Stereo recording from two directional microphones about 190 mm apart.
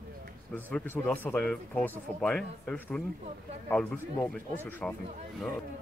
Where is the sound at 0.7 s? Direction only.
10° left (ahead or behind).